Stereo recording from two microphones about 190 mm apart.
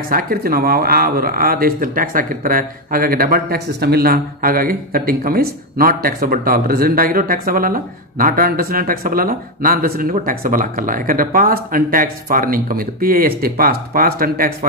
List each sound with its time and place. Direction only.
0.1 s speech: 50° right (ahead or behind)